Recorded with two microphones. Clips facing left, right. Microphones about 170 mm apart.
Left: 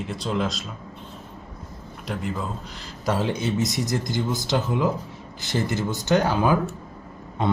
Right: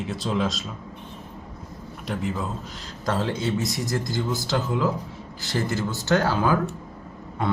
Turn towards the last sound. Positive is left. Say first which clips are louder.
# left 2 dB
turn(degrees=20)  # may be behind; listen again after turning